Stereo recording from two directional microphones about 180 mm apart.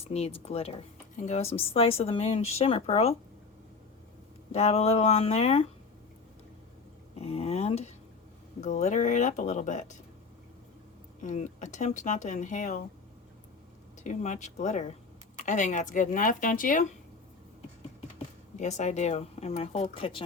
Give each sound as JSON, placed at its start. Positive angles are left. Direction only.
{"t": 0.1, "sound": "speech", "side_deg": 35}
{"t": 4.5, "sound": "speech", "side_deg": 35}
{"t": 7.2, "sound": "speech", "side_deg": 35}
{"t": 11.2, "sound": "speech", "side_deg": 40}
{"t": 14.0, "sound": "speech", "side_deg": 40}
{"t": 18.5, "sound": "speech", "side_deg": 40}